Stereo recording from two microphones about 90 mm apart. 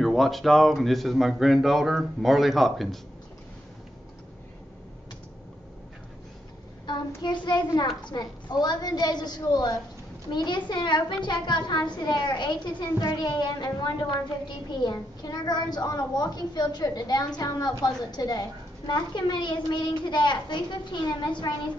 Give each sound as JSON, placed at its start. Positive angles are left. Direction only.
{"t": 0.0, "sound": "speech", "side_deg": 0}
{"t": 7.2, "sound": "a woman's voice", "side_deg": 55}
{"t": 14.7, "sound": "a woman's voice", "side_deg": 55}